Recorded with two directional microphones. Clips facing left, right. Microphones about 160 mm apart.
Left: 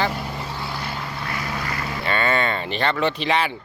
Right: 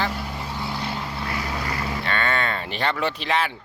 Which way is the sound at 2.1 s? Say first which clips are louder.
Left 4 dB; 5° left (ahead or behind).